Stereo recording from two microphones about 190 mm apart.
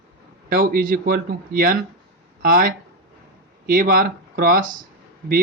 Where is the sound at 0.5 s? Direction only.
50° right (ahead or behind).